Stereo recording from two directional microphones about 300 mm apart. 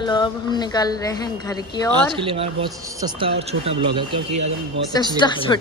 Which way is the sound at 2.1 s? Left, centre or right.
Centre.